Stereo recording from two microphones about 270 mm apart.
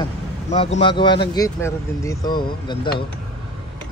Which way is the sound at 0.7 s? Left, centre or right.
Centre.